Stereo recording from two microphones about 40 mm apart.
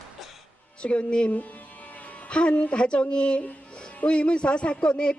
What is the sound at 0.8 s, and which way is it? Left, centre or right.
Speech, left.